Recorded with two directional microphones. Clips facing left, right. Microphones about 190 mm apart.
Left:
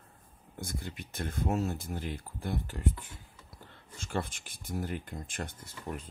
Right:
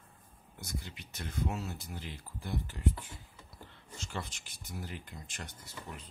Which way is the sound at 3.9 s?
50° left (ahead or behind).